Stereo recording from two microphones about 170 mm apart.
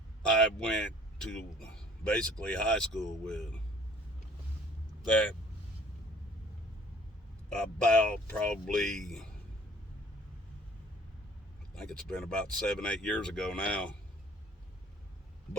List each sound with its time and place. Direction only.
0.3 s a man's voice: 5° left (ahead or behind)
7.6 s a man's voice: 5° left (ahead or behind)
11.7 s a man's voice: 5° left (ahead or behind)